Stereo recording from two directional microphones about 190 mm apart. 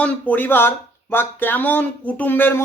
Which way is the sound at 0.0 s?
10° left (ahead or behind).